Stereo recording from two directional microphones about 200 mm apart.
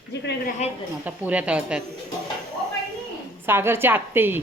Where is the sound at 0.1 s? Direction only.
60° left (ahead or behind).